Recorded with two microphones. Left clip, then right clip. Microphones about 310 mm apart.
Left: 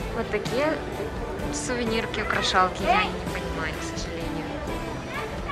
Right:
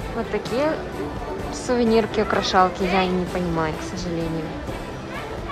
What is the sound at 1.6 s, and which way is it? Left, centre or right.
A woman's voice, centre.